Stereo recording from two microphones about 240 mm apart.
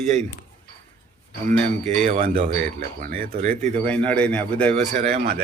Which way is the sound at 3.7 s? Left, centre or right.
Centre.